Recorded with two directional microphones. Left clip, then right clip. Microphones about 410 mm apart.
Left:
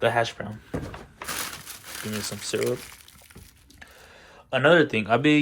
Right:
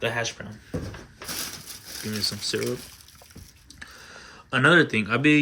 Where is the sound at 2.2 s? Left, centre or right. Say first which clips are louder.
Right 1 dB; centre.